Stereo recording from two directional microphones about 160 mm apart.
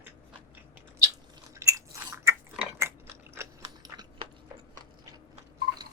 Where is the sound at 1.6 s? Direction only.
20° right (ahead or behind).